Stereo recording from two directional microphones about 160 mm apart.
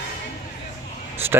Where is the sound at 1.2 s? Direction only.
15° right (ahead or behind).